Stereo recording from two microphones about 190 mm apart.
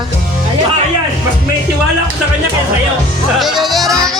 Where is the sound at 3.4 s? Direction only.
Centre (ahead or behind).